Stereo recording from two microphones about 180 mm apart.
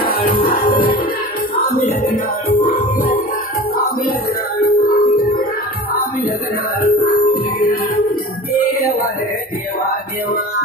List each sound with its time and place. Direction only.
0.0 s music: 55° left (ahead or behind)
4.6 s music: 55° left (ahead or behind)
6.8 s music: 55° left (ahead or behind)